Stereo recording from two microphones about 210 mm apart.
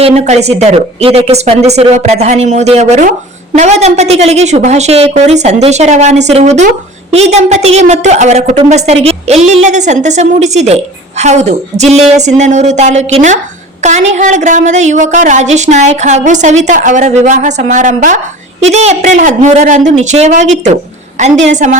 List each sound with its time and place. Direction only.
0.0 s speech: 30° right (ahead or behind)